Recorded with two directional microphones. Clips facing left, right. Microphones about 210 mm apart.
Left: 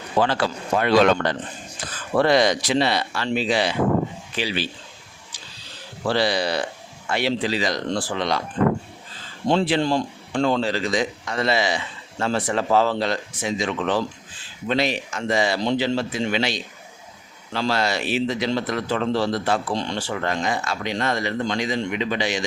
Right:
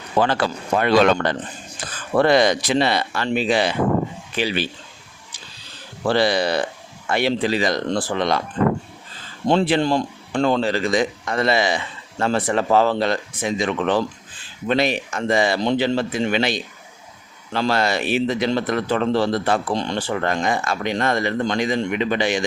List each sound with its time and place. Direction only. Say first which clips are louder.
0.8 s speech: right 1 dB; 55° right (ahead or behind)
6.1 s speech: right 3 dB; 50° right (ahead or behind)
9.5 s speech: right 2 dB; 55° right (ahead or behind)